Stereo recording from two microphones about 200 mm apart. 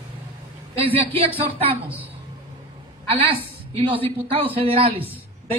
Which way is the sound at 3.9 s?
25° right (ahead or behind).